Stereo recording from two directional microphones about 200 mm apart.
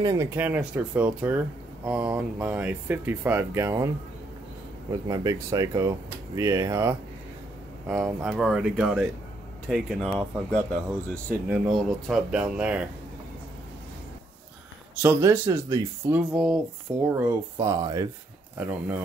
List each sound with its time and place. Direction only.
0.0 s speech: 20° right (ahead or behind)
0.4 s speech: 10° right (ahead or behind)
5.0 s speech: 15° right (ahead or behind)
15.0 s speech: 15° right (ahead or behind)
18.6 s speech: 10° right (ahead or behind)